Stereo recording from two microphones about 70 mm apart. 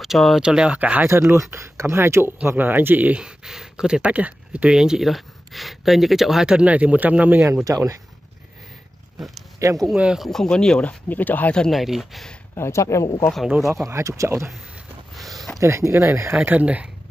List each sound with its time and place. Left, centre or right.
0.0 s speech: centre
1.0 s speech: right
2.5 s speech: right
3.2 s speech: centre
7.6 s speech: right
9.6 s speech: right
10.1 s speech: centre; by 11.5 s left
11.7 s speech: centre
12.5 s speech: left
13.6 s speech: centre
13.8 s speech: right
15.1 s a sound: centre
15.6 s speech: right
16.4 s speech: right